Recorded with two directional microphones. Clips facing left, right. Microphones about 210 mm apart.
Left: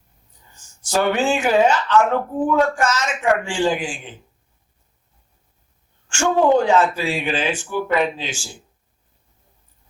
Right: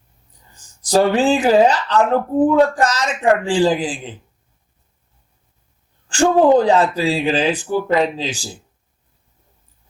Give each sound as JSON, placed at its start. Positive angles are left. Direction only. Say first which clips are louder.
{"t": 0.8, "sound": "speech", "louder": "right 5 dB", "side_deg": -35}
{"t": 6.1, "sound": "speech", "louder": "right 4 dB", "side_deg": -35}